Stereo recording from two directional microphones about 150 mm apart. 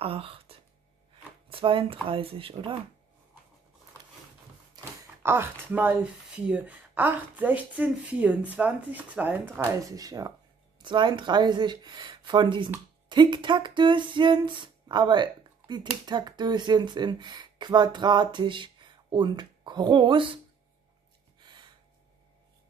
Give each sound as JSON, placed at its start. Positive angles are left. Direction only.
{"t": 0.0, "sound": "speech", "side_deg": -40}
{"t": 5.2, "sound": "speech", "side_deg": -15}
{"t": 9.6, "sound": "speech", "side_deg": -20}
{"t": 13.1, "sound": "a sound", "side_deg": -30}
{"t": 16.1, "sound": "speech", "side_deg": -30}
{"t": 21.4, "sound": "gasp", "side_deg": -30}